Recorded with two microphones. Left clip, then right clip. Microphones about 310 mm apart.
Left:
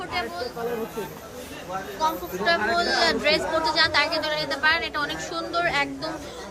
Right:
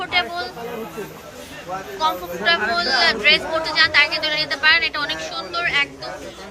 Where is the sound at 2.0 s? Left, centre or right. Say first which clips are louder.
Right 4 dB; centre.